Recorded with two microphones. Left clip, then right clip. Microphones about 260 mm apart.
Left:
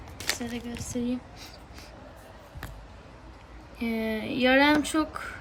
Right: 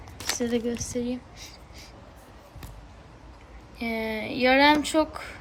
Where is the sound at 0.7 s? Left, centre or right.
Centre.